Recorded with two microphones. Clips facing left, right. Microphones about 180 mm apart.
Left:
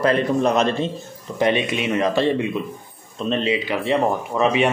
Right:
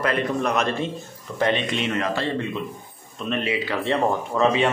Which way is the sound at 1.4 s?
10° left (ahead or behind).